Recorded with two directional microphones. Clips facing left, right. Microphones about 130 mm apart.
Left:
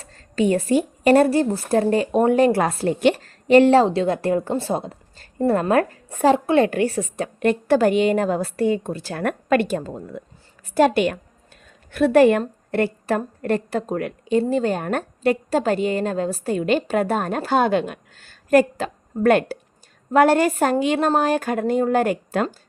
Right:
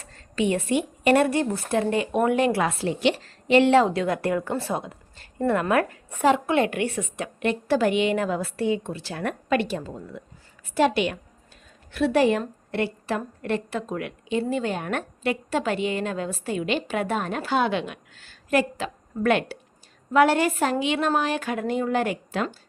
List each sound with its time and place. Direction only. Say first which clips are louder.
0.0 s speech: left 4 dB; 35° left (ahead or behind)